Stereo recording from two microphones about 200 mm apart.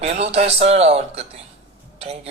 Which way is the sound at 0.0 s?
30° right (ahead or behind).